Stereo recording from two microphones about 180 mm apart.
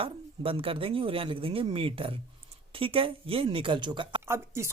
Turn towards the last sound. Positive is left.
turn(degrees=-15)  # may be behind; listen again after turning